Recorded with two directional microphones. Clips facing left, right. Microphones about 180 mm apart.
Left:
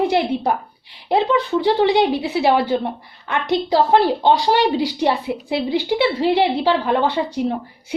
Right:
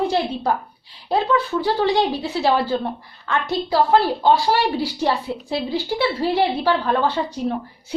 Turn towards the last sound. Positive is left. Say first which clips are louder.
# left 1 dB
turn(degrees=15)  # may be behind; listen again after turning